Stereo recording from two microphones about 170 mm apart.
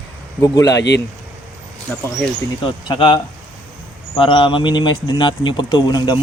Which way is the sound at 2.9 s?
30° left (ahead or behind).